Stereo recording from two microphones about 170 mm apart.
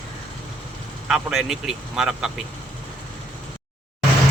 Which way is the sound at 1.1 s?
Centre (ahead or behind).